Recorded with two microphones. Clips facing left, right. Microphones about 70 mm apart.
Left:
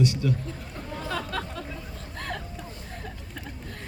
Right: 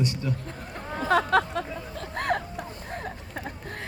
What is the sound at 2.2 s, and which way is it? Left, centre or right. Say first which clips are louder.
Vehicle: right 8 dB; right.